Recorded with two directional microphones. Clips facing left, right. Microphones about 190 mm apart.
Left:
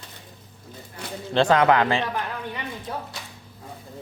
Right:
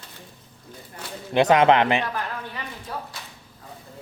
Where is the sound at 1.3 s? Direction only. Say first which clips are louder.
Right 2 dB; 20° right (ahead or behind).